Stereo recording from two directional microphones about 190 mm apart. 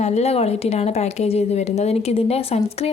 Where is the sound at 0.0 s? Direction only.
35° left (ahead or behind).